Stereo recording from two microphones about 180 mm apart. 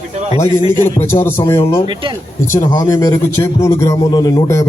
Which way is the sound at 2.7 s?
20° left (ahead or behind).